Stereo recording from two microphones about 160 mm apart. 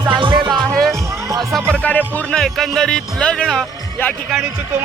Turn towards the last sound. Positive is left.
turn(degrees=0)  # may be behind; listen again after turning